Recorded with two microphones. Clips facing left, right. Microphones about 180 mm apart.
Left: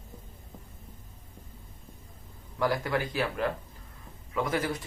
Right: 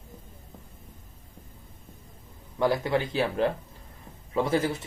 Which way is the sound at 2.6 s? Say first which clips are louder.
Right 3 dB; 25° right (ahead or behind).